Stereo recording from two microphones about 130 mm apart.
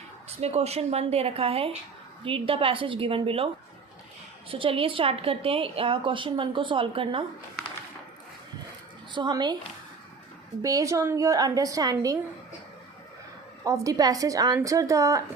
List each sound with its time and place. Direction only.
0.3 s a woman's voice: 55° right (ahead or behind)
9.1 s a woman's voice: 35° right (ahead or behind)
10.6 s a woman's voice: 25° right (ahead or behind)
13.7 s a woman's voice: 25° right (ahead or behind)